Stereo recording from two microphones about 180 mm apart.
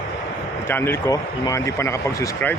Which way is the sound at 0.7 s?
15° left (ahead or behind).